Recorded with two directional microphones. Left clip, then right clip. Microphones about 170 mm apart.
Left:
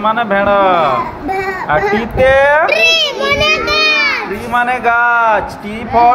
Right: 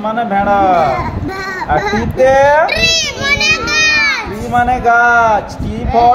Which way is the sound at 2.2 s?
20° left (ahead or behind).